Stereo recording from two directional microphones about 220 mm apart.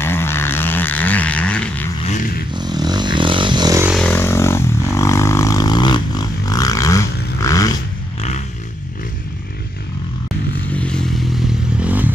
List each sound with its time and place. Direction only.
0.0 s vehicle: 10° left (ahead or behind)
2.0 s vehicle: 35° left (ahead or behind)
2.5 s vehicle: 20° right (ahead or behind)
3.9 s vehicle: 5° left (ahead or behind)
10.7 s a sound: 5° left (ahead or behind)